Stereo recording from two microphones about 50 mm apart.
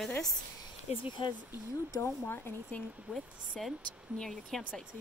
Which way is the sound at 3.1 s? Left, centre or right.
Centre.